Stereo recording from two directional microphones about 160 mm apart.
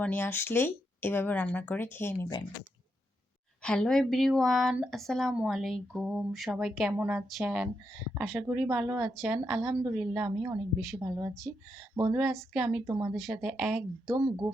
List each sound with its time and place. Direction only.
0.0 s speech: 10° left (ahead or behind)
3.6 s a woman's voice: 5° left (ahead or behind); by 11.3 s 15° right (ahead or behind)
12.1 s a woman's voice: 5° right (ahead or behind)
13.1 s speech: centre (ahead or behind)
14.1 s speech: 25° right (ahead or behind)